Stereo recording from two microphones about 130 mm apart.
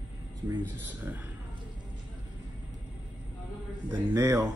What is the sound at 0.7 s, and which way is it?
Speech, 15° right (ahead or behind).